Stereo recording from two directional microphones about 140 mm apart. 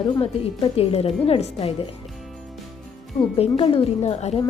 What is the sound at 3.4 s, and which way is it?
A woman's voice, 40° left (ahead or behind).